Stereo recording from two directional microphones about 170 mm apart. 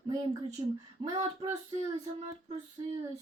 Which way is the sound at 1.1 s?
35° right (ahead or behind).